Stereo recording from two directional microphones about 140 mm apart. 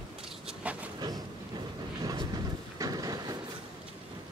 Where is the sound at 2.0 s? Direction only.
25° right (ahead or behind).